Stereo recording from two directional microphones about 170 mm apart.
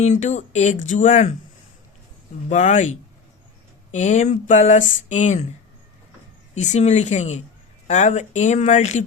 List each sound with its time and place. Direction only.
0.0 s speech: 45° left (ahead or behind)
2.5 s speech: 45° left (ahead or behind)
3.9 s speech: 45° left (ahead or behind)
6.5 s speech: 45° left (ahead or behind)